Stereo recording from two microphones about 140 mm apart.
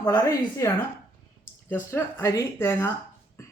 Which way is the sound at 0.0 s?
25° left (ahead or behind).